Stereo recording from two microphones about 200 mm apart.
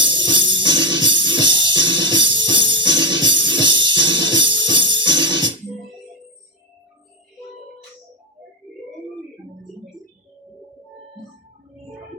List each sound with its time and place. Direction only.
0.3 s music: 25° right (ahead or behind)